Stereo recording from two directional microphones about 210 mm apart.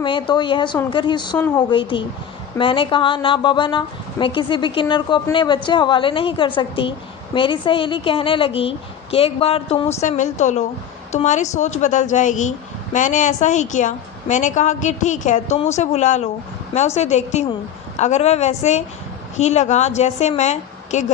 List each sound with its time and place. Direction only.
0.0 s a woman's voice: 20° left (ahead or behind)